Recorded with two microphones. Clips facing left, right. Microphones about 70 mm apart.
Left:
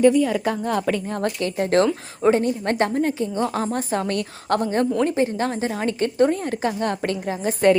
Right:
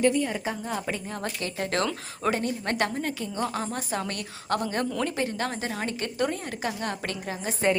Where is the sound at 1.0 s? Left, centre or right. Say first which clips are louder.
Left 8 dB; left.